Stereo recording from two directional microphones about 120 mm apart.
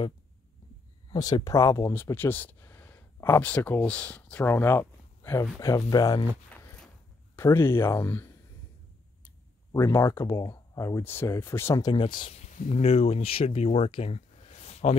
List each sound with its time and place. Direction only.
1.1 s speech: 30° left (ahead or behind)
7.3 s speech: 20° left (ahead or behind)
9.7 s speech: 25° left (ahead or behind)
11.8 s speech: 40° left (ahead or behind)
12.3 s speech: 75° left (ahead or behind)